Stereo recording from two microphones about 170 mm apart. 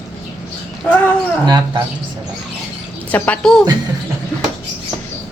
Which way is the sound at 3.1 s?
10° left (ahead or behind).